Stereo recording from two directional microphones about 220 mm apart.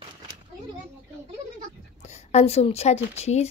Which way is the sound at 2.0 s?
30° left (ahead or behind).